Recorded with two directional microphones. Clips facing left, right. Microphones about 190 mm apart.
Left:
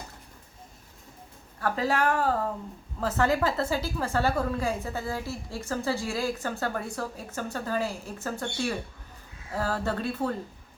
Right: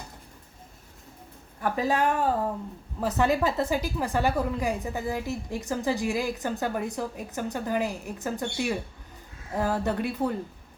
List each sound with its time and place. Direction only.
1.6 s a woman's voice: 15° right (ahead or behind)